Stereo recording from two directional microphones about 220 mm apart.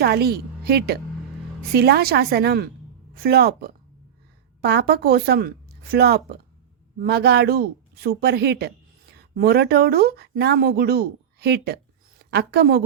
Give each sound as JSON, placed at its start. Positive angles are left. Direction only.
{"t": 0.0, "sound": "a woman's voice", "side_deg": -45}